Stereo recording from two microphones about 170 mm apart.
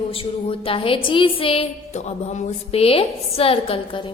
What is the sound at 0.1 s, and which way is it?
A woman's voice, 35° left (ahead or behind).